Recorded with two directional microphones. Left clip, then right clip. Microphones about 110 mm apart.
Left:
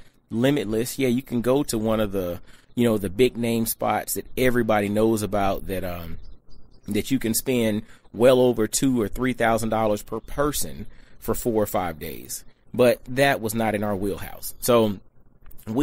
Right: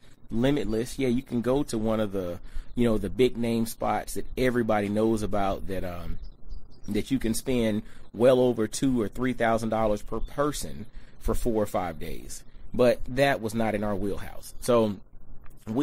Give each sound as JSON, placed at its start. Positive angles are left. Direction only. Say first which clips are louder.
{"t": 0.3, "sound": "speech", "louder": "left 4 dB", "side_deg": 30}